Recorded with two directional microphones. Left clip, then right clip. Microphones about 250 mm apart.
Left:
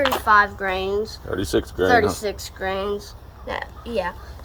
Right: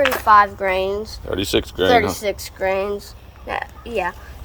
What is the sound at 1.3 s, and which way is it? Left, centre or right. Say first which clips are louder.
Speech: right 5 dB; centre.